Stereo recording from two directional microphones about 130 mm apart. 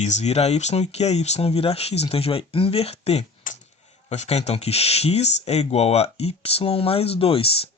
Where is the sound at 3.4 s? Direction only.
90° left.